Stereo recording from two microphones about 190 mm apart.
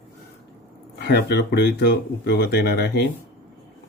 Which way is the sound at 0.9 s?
60° left (ahead or behind).